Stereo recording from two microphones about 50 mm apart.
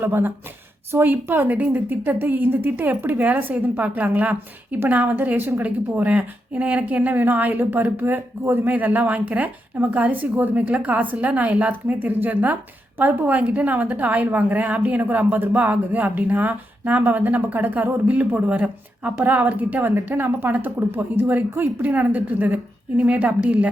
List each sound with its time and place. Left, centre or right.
0.0 s a woman's voice: right
19.2 s a woman's voice: right
21.8 s a woman's voice: right